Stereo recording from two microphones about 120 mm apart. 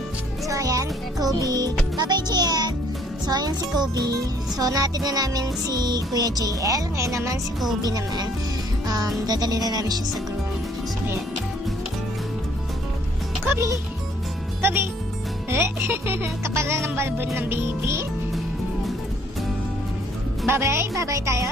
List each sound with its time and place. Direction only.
0.5 s music: 30° right (ahead or behind)
3.3 s speech: 35° right (ahead or behind)
8.8 s music: 35° right (ahead or behind)
9.2 s speech: 35° right (ahead or behind)
13.5 s music: 25° right (ahead or behind)
14.6 s speech: 20° right (ahead or behind)
20.4 s speech: 20° right (ahead or behind)